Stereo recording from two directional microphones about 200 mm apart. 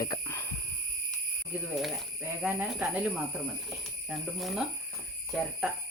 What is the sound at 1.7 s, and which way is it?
Speech, 5° right (ahead or behind).